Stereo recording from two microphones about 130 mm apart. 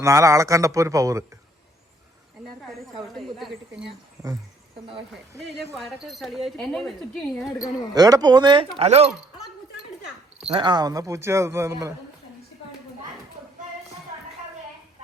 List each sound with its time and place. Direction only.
0.0 s a man's voice: 25° right (ahead or behind)
3.3 s speech: centre (ahead or behind)
5.7 s speech: centre (ahead or behind)
7.9 s speech: 30° right (ahead or behind)
8.8 s speech: 55° right (ahead or behind)
10.5 s a man's voice: 35° right (ahead or behind)